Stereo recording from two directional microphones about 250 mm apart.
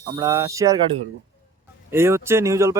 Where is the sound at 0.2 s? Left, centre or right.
Centre.